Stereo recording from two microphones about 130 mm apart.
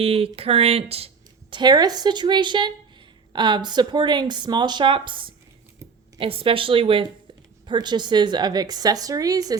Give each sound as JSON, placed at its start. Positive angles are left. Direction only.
{"t": 0.0, "sound": "a woman's voice", "side_deg": -45}